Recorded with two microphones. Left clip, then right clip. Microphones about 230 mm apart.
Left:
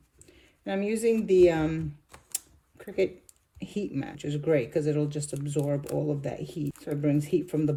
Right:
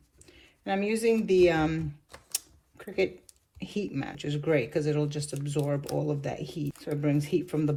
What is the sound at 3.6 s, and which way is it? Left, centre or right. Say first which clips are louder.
Speech: even; right.